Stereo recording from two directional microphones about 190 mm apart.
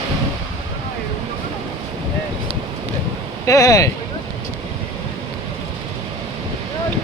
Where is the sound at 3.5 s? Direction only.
20° left (ahead or behind).